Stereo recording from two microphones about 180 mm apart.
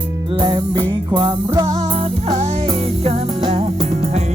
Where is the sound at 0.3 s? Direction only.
25° right (ahead or behind).